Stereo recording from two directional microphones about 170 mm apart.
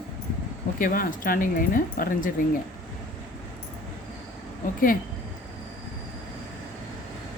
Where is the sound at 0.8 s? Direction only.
55° left (ahead or behind).